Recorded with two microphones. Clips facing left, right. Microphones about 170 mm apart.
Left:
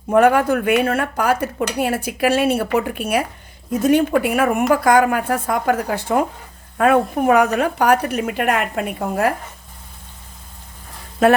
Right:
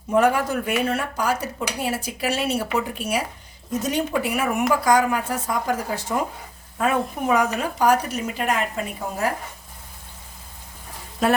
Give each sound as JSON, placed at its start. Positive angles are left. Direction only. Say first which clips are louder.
{"t": 0.1, "sound": "speech", "louder": "left 5 dB", "side_deg": 60}